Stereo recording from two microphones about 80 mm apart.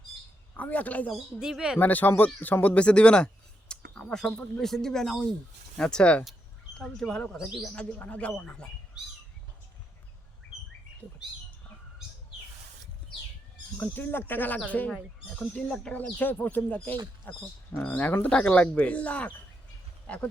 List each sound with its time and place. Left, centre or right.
0.5 s a man's voice: centre
1.1 s speech: centre
1.8 s speech: left; by 7.7 s centre
7.9 s speech: centre
13.7 s speech: left